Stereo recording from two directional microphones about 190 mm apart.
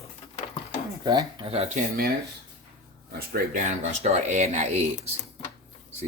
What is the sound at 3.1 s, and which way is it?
Speech, 55° right (ahead or behind).